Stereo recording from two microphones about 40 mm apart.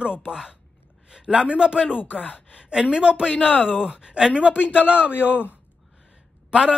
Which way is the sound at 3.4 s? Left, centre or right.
Left.